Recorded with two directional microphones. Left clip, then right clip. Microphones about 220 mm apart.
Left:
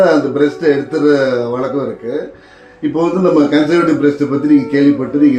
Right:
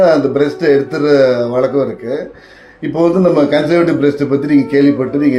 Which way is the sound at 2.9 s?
45° right (ahead or behind).